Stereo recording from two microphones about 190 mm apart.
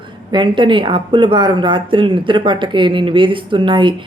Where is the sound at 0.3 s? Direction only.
25° right (ahead or behind).